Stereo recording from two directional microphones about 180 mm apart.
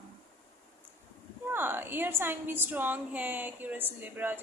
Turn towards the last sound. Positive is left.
turn(degrees=-10)  # may be behind; listen again after turning